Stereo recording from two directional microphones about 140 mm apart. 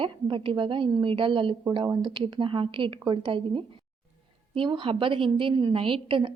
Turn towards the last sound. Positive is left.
turn(degrees=-40)  # may be behind; listen again after turning